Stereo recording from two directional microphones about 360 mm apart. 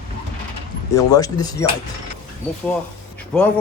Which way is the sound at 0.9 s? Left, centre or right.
Centre.